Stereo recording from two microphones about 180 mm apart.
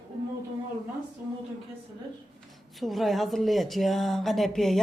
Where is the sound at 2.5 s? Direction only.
Centre (ahead or behind).